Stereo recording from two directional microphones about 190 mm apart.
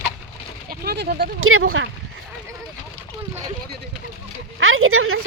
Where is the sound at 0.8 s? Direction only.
55° right (ahead or behind).